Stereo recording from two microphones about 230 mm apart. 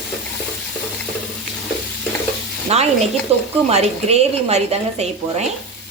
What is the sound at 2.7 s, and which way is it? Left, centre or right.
A woman's voice, right.